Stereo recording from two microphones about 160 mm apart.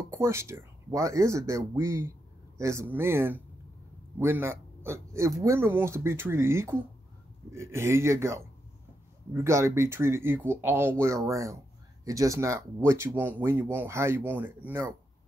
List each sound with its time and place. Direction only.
0.1 s speech: 15° right (ahead or behind)